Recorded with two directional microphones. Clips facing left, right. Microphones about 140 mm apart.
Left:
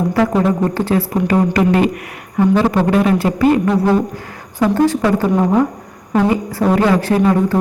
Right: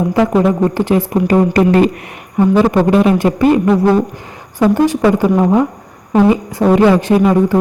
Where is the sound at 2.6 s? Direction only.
20° right (ahead or behind).